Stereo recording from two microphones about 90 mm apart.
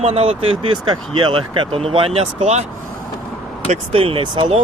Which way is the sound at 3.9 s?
90° right.